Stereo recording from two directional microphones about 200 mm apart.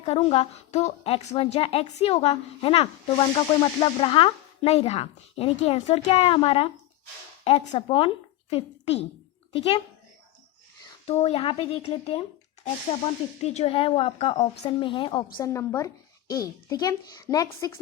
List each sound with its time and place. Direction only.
0.0 s a woman's voice: 30° left (ahead or behind)
11.0 s a woman's voice: 30° left (ahead or behind)
13.4 s a woman's voice: 35° left (ahead or behind); by 17.7 s 15° left (ahead or behind)